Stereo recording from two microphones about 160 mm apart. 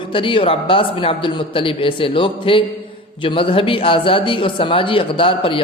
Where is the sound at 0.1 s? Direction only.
35° left (ahead or behind).